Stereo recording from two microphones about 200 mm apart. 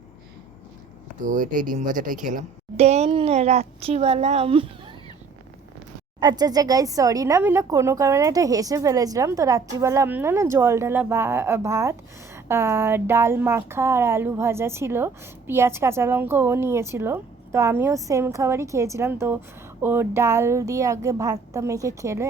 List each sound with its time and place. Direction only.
1.2 s speech: 40° right (ahead or behind)
6.1 s speech: 20° right (ahead or behind)